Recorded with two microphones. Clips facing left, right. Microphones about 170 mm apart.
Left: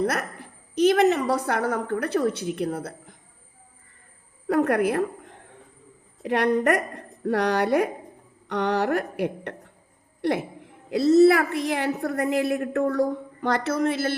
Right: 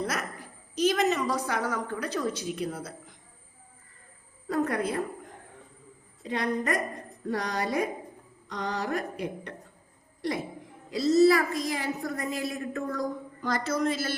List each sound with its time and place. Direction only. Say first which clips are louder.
0.0 s a woman's voice: left 6 dB; 60° left (ahead or behind)
4.4 s a woman's voice: left 7 dB; 65° left (ahead or behind)
6.2 s a woman's voice: left 8 dB; 70° left (ahead or behind)